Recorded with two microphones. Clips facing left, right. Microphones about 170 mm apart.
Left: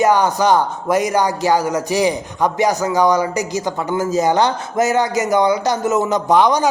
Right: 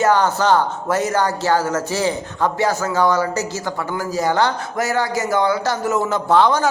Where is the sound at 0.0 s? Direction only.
15° left (ahead or behind).